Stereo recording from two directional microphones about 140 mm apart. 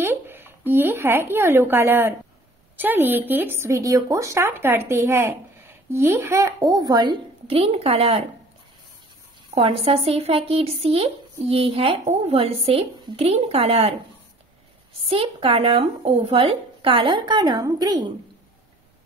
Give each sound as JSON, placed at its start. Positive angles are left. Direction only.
{"t": 0.0, "sound": "a woman's voice", "side_deg": -15}
{"t": 9.5, "sound": "speech", "side_deg": -45}
{"t": 15.0, "sound": "speech", "side_deg": -45}